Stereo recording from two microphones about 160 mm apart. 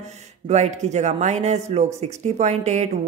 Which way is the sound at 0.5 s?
45° right (ahead or behind).